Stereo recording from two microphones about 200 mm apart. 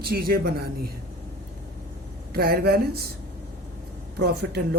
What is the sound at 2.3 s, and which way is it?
Speech, 50° right (ahead or behind).